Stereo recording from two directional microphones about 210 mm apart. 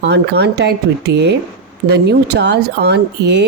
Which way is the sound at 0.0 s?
55° right (ahead or behind).